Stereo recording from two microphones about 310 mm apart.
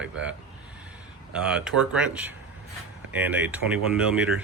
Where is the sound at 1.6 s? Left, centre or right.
Centre.